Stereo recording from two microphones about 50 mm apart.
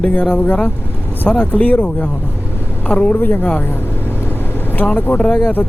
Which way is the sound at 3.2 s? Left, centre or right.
Left.